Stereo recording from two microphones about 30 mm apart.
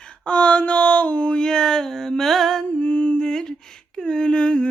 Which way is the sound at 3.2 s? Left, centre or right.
Left.